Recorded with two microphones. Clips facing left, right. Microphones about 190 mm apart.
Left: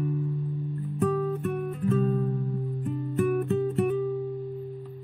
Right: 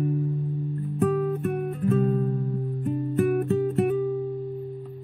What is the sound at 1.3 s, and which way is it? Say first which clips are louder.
Music: right 2 dB; 55° right (ahead or behind).